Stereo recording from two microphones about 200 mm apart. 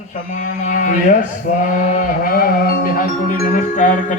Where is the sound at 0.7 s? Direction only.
40° left (ahead or behind).